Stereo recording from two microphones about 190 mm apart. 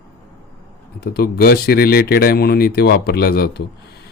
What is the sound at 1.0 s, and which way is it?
A man's voice, 55° left (ahead or behind).